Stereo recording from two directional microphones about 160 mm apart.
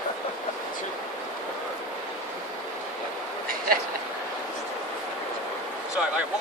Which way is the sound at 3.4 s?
65° right (ahead or behind).